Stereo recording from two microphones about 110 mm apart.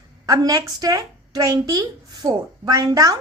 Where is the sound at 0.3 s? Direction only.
35° right (ahead or behind).